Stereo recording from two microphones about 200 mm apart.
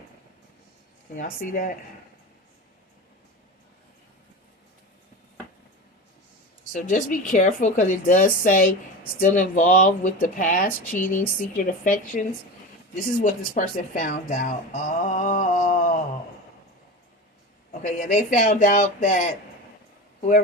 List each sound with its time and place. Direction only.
1.1 s speech: 40° left (ahead or behind)
6.7 s speech: 40° left (ahead or behind)
13.2 s speech: 40° left (ahead or behind)
17.7 s speech: 40° left (ahead or behind)